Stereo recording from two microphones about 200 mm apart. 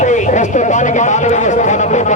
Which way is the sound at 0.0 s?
40° left (ahead or behind).